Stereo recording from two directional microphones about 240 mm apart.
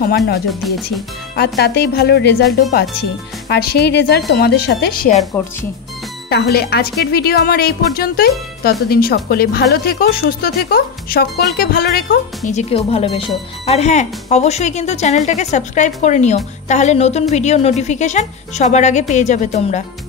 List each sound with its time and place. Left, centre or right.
0.6 s speech: centre
1.6 s speech: left
5.4 s speech: centre
6.2 s speech: left
12.4 s a woman's voice: left